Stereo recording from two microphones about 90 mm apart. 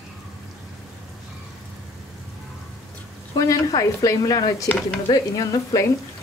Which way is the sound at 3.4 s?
40° left (ahead or behind).